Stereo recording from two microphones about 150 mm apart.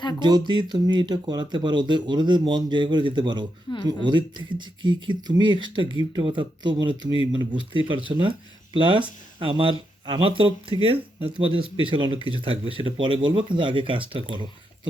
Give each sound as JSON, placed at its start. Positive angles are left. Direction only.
{"t": 0.2, "sound": "speech", "side_deg": -30}